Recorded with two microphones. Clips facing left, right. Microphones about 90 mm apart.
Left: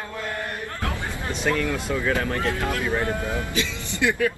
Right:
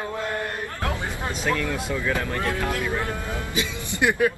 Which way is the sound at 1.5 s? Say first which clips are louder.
Left 2 dB; 15° right (ahead or behind).